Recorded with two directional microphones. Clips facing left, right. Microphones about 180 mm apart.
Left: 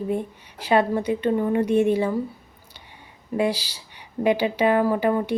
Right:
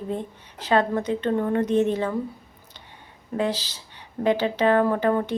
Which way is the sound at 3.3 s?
10° left (ahead or behind).